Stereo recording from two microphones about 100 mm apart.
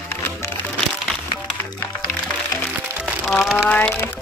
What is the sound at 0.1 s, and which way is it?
Music, 25° left (ahead or behind).